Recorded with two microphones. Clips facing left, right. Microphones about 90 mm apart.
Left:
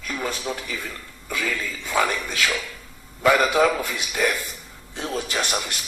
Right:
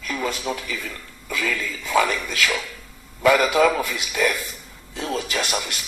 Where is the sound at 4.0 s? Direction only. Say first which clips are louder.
Right 1 dB; 25° left (ahead or behind).